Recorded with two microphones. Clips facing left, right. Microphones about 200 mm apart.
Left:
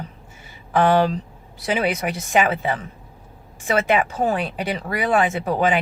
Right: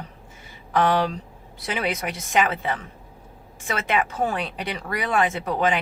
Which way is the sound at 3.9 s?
Centre (ahead or behind).